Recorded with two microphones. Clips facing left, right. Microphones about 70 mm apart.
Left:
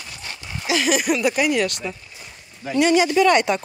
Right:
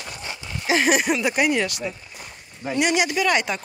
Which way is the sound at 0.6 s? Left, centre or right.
Right.